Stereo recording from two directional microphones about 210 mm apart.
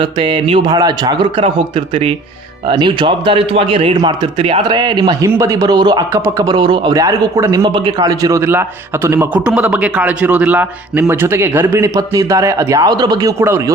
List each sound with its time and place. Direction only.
0.0 s a man's voice: 25° right (ahead or behind)